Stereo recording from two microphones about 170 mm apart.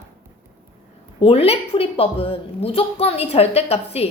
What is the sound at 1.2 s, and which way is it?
A woman's voice, 35° left (ahead or behind).